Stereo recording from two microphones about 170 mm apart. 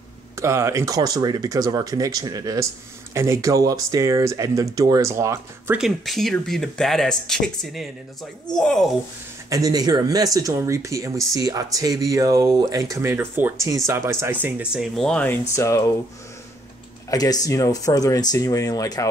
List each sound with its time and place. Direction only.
0.4 s speech: 15° right (ahead or behind)
5.8 s speech: centre (ahead or behind)
9.5 s speech: 20° right (ahead or behind); by 15.3 s 5° left (ahead or behind)
15.5 s speech: 15° left (ahead or behind)
17.1 s speech: 20° left (ahead or behind)